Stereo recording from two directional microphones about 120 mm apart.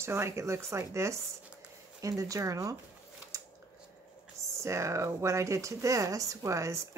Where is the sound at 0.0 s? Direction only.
20° right (ahead or behind).